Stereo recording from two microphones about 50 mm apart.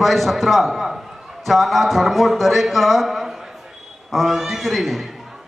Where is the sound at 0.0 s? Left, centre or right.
Centre.